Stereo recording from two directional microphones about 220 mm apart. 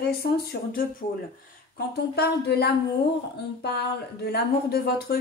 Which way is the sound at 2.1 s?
45° left (ahead or behind).